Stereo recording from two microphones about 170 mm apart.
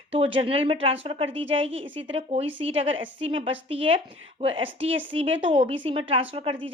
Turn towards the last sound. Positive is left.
turn(degrees=-30)  # may be behind; listen again after turning